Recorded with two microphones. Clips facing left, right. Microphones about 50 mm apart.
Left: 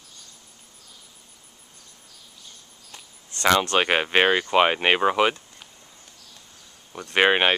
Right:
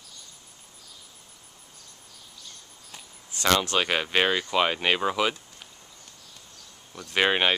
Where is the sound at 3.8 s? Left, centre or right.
Left.